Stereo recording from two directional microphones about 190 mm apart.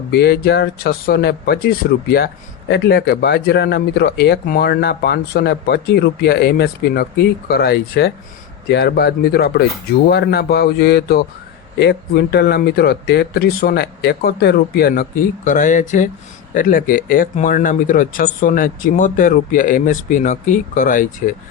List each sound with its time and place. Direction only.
0.1 s speech: 60° left (ahead or behind)